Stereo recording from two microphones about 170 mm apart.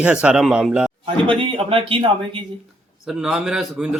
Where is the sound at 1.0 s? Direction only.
30° right (ahead or behind).